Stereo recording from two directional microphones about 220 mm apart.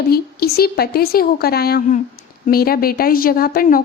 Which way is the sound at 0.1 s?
45° left (ahead or behind).